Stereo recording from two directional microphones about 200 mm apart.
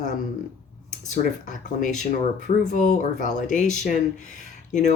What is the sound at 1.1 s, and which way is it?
Speech, 40° left (ahead or behind).